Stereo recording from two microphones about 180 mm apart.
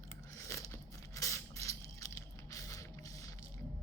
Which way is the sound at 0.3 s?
15° left (ahead or behind).